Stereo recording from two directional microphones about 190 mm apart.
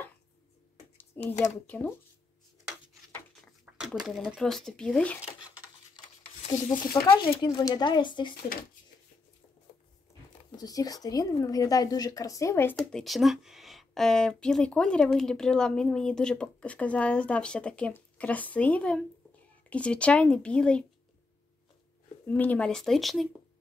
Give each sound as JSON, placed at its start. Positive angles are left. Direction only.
{"t": 0.9, "sound": "a sound", "side_deg": 10}
{"t": 1.7, "sound": "speech", "side_deg": 5}
{"t": 3.7, "sound": "a sound", "side_deg": -10}
{"t": 4.0, "sound": "a woman's voice", "side_deg": -5}
{"t": 6.4, "sound": "speech", "side_deg": 25}
{"t": 10.5, "sound": "a woman's voice", "side_deg": 20}
{"t": 22.3, "sound": "a woman's voice", "side_deg": 10}